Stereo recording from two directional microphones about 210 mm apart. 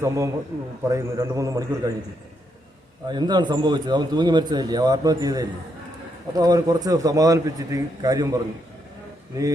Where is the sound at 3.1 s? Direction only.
20° right (ahead or behind).